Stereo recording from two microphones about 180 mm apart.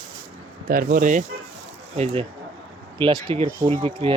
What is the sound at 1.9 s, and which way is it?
Speech, 35° right (ahead or behind).